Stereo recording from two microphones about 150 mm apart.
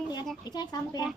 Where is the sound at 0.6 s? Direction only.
30° left (ahead or behind).